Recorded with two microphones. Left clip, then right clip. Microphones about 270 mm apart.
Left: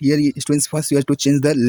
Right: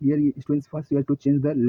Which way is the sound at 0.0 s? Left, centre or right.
Left.